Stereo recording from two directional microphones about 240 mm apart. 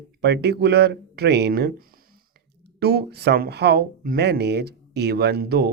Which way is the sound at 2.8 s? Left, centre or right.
Right.